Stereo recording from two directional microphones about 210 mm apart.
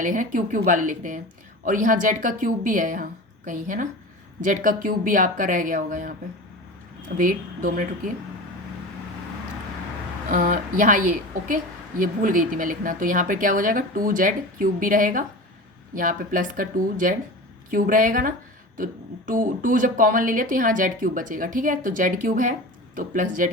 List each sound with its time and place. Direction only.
0.0 s speech: 40° right (ahead or behind)
7.2 s speech: 40° right (ahead or behind)
10.2 s speech: 40° right (ahead or behind)